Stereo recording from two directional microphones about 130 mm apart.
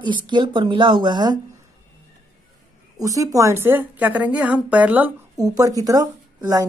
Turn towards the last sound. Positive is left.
turn(degrees=-30)  # may be behind; listen again after turning